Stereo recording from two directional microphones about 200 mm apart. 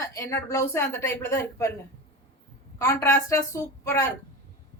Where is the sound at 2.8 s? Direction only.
15° left (ahead or behind).